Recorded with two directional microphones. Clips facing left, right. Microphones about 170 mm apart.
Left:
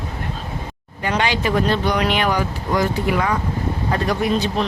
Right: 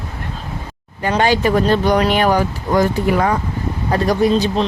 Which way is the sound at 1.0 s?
40° right (ahead or behind).